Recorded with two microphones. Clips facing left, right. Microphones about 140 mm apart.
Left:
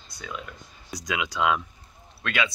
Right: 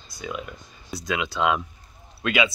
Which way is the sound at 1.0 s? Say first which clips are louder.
Right 2 dB; 15° left (ahead or behind).